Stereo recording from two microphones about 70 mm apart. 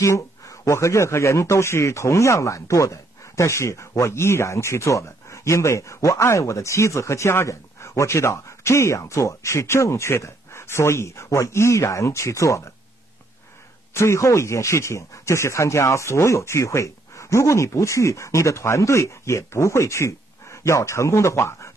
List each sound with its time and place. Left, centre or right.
0.0 s speech: left
13.9 s speech: left